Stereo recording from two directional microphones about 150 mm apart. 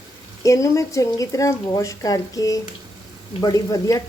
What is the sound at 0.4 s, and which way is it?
Speech, 20° left (ahead or behind).